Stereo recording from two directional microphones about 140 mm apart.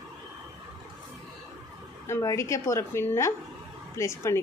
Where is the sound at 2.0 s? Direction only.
20° left (ahead or behind).